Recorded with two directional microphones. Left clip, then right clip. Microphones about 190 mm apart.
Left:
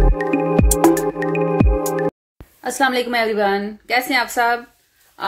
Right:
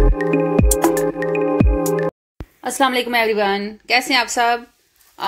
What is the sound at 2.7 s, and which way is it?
A woman's voice, 10° right (ahead or behind).